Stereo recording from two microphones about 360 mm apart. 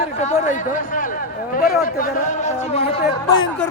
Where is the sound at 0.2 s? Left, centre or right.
Centre.